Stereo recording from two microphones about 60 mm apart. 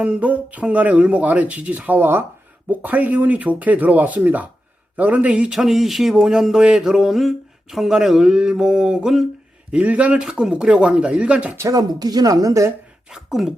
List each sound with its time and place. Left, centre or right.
0.0 s speech: right
5.5 s a sound: centre
9.7 s speech: right
10.2 s a sound: centre
11.7 s speech: right
13.1 s speech: centre